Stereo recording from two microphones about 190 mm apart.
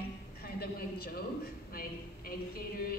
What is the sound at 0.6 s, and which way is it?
A woman's voice, 55° left (ahead or behind).